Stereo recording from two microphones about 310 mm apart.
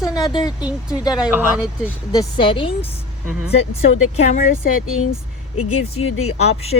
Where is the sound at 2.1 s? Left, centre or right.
Centre.